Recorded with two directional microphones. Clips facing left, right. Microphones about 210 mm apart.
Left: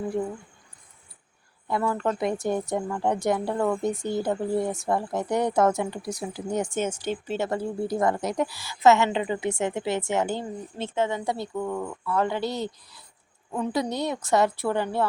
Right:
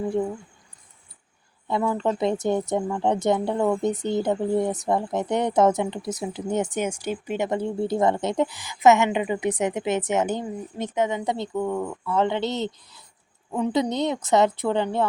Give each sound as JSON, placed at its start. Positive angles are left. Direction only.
{"t": 1.6, "sound": "speech", "side_deg": -20}